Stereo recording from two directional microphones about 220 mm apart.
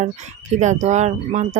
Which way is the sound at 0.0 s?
35° right (ahead or behind).